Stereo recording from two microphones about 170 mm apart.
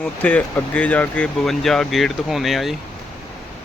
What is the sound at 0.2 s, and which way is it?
Speech, 10° left (ahead or behind).